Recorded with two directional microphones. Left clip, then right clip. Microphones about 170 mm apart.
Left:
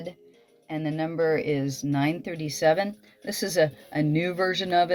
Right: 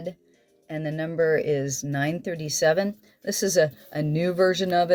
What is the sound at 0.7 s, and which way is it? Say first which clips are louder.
Speech: left 1 dB; 50° right (ahead or behind).